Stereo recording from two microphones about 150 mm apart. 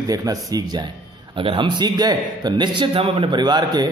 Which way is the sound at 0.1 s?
25° right (ahead or behind).